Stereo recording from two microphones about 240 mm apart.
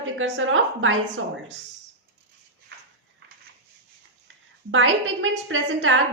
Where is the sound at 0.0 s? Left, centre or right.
Right.